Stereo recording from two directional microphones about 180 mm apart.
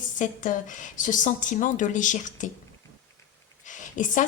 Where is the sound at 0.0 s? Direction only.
45° left (ahead or behind).